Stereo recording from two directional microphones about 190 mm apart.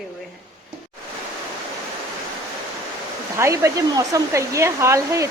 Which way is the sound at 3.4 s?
15° right (ahead or behind).